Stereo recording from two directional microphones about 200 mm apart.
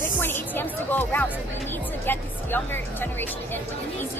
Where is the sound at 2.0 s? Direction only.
10° left (ahead or behind).